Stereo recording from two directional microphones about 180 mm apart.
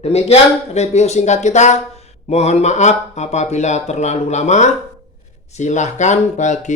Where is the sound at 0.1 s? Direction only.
35° left (ahead or behind).